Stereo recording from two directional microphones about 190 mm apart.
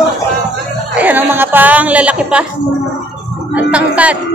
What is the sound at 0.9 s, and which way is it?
Speech, 10° right (ahead or behind).